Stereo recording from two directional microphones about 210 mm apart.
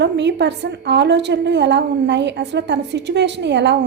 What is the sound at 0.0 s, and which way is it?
A woman's voice, 55° right (ahead or behind).